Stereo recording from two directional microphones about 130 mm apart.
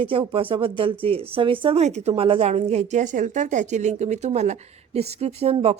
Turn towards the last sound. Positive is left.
turn(degrees=-50)  # may be behind; listen again after turning